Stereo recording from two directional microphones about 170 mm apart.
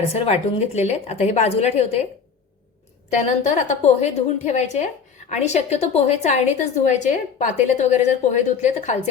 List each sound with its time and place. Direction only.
0.1 s a woman's voice: 40° left (ahead or behind)
3.2 s a woman's voice: 45° left (ahead or behind)